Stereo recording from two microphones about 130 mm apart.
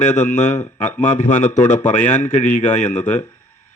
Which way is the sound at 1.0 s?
65° left (ahead or behind).